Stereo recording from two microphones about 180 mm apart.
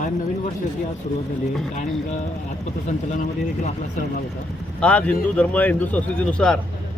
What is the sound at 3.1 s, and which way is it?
Speech, 40° left (ahead or behind).